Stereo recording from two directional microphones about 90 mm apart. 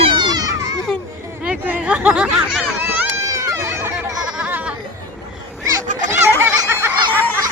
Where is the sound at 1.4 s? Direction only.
15° right (ahead or behind).